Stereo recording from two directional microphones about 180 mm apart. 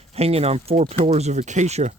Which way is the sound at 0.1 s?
35° right (ahead or behind).